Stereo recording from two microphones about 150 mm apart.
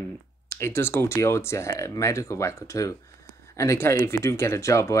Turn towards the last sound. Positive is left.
turn(degrees=20)  # may be behind; listen again after turning